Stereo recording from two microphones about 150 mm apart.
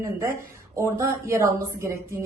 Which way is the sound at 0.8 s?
20° right (ahead or behind).